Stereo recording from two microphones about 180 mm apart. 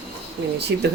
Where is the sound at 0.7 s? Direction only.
75° right (ahead or behind).